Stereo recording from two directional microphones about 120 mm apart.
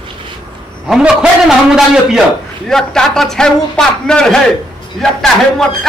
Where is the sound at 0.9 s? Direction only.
5° right (ahead or behind).